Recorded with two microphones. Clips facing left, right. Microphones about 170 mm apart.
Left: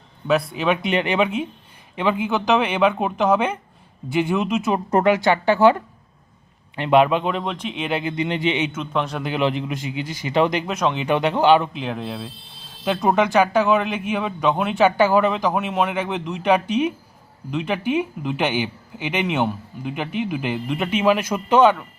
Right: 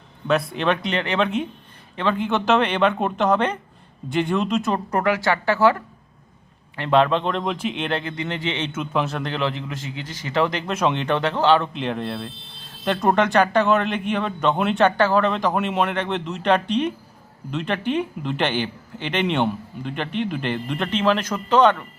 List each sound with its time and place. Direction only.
0.3 s a man's voice: centre (ahead or behind)
4.9 s a woman's voice: 25° left (ahead or behind)
6.7 s speech: 15° left (ahead or behind)
8.7 s speech: 5° right (ahead or behind); by 10.7 s 15° left (ahead or behind)
10.7 s speech: centre (ahead or behind)
11.7 s a man's voice: centre (ahead or behind)